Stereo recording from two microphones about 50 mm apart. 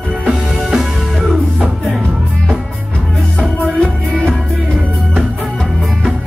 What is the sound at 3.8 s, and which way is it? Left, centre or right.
Music, left.